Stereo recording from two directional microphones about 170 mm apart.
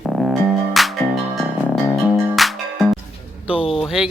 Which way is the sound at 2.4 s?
Centre (ahead or behind).